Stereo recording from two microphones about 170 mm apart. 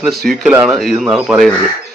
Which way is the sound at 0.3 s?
5° left (ahead or behind).